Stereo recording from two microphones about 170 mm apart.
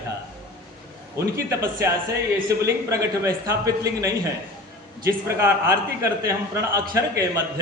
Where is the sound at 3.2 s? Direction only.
20° right (ahead or behind).